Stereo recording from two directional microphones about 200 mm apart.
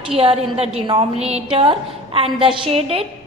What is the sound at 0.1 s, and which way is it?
A woman's voice, 30° right (ahead or behind).